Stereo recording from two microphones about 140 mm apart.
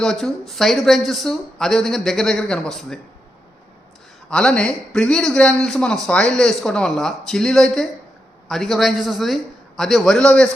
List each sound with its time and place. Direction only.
0.0 s a man's voice: 5° left (ahead or behind)
4.3 s a man's voice: 5° left (ahead or behind)